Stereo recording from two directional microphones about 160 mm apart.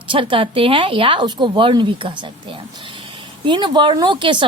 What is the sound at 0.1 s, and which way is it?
A woman's voice, 30° right (ahead or behind).